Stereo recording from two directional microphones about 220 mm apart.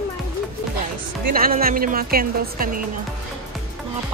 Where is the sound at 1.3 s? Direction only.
40° right (ahead or behind).